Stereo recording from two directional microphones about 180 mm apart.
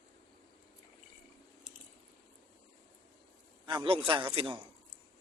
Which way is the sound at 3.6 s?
25° right (ahead or behind).